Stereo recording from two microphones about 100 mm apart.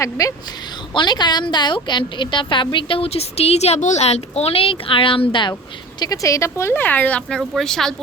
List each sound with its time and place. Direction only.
0.0 s speech: 35° left (ahead or behind)
0.9 s a woman's voice: 45° left (ahead or behind)
6.0 s speech: 35° left (ahead or behind); by 7.9 s 5° left (ahead or behind)